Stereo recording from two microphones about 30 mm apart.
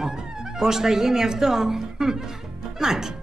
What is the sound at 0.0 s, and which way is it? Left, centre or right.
Speech, centre.